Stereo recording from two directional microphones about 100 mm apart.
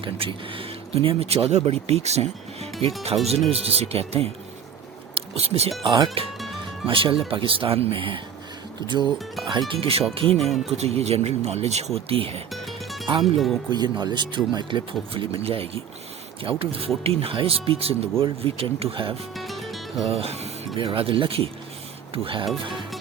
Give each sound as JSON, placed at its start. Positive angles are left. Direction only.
{"t": 0.0, "sound": "speech", "side_deg": -60}
{"t": 3.1, "sound": "speech", "side_deg": -50}
{"t": 3.5, "sound": "speech", "side_deg": -85}
{"t": 6.2, "sound": "speech", "side_deg": -70}
{"t": 9.5, "sound": "speech", "side_deg": -60}
{"t": 10.3, "sound": "speech", "side_deg": 0}
{"t": 10.7, "sound": "speech", "side_deg": -90}
{"t": 12.0, "sound": "speech", "side_deg": -70}
{"t": 12.5, "sound": "music", "side_deg": 0}
{"t": 13.2, "sound": "speech", "side_deg": 0}
{"t": 13.7, "sound": "speech", "side_deg": -45}
{"t": 19.4, "sound": "music", "side_deg": 0}
{"t": 20.1, "sound": "speech", "side_deg": -85}
{"t": 20.7, "sound": "speech", "side_deg": -65}